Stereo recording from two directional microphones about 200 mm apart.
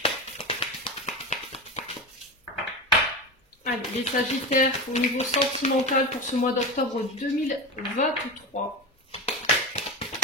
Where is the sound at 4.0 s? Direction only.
35° left (ahead or behind).